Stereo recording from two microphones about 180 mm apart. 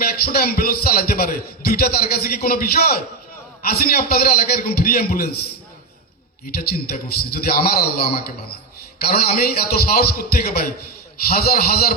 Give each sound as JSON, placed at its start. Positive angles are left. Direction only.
{"t": 0.0, "sound": "a man's voice", "side_deg": 60}
{"t": 6.6, "sound": "a man's voice", "side_deg": 55}